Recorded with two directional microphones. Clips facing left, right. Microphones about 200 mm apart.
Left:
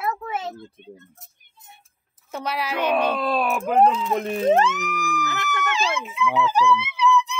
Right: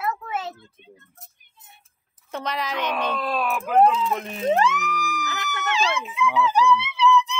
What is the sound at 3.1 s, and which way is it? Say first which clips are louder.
Speech: left 3 dB; 30° left (ahead or behind).